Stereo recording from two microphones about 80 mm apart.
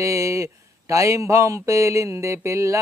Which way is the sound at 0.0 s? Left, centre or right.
Right.